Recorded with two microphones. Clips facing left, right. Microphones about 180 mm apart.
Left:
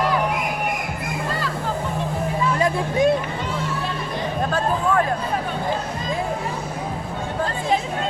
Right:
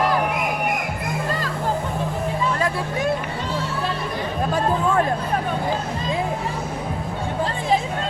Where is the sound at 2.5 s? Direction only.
15° left (ahead or behind).